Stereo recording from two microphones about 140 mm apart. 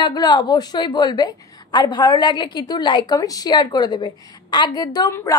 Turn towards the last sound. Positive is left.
turn(degrees=30)  # may be behind; listen again after turning